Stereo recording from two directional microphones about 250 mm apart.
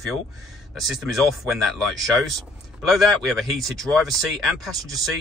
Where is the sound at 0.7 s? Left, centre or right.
Centre.